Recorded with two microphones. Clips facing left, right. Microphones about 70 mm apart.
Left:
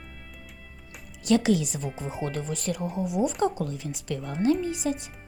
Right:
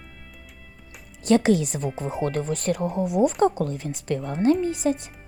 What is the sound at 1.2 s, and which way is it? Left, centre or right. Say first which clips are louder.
Speech: right 3 dB; right.